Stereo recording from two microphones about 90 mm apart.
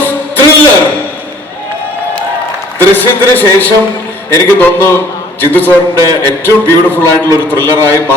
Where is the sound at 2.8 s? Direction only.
20° left (ahead or behind).